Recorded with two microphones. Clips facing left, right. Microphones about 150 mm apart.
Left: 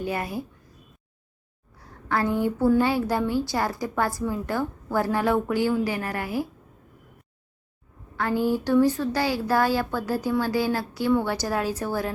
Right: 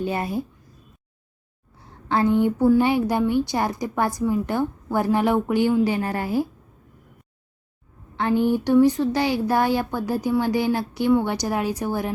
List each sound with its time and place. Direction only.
0.0 s a woman's voice: 25° right (ahead or behind)
1.8 s a woman's voice: 25° right (ahead or behind)
8.1 s a woman's voice: 20° right (ahead or behind)